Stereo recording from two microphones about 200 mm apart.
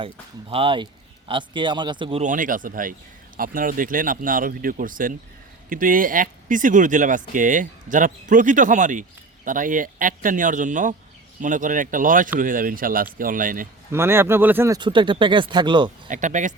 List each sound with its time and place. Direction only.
0.5 s a man's voice: 25° right (ahead or behind); by 13.7 s 40° right (ahead or behind)
13.9 s speech: 10° right (ahead or behind)
14.8 s a man's voice: 25° right (ahead or behind)
16.0 s speech: 40° right (ahead or behind)